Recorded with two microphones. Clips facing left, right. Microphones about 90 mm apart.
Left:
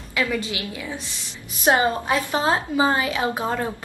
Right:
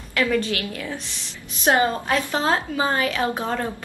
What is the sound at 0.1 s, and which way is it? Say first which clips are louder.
A woman's voice: right 3 dB; 10° left (ahead or behind).